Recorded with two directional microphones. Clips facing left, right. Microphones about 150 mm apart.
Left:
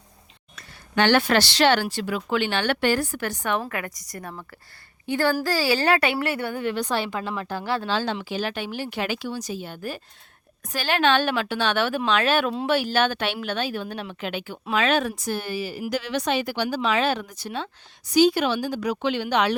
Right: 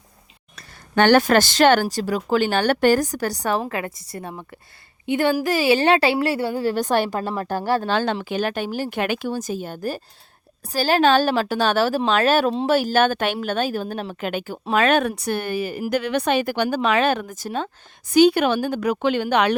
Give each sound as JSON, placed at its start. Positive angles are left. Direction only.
{"t": 0.9, "sound": "a woman's voice", "side_deg": -45}
{"t": 18.1, "sound": "speech", "side_deg": -60}